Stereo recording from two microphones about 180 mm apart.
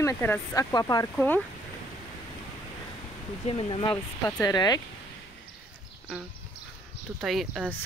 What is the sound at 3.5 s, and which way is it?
Speech, 30° left (ahead or behind).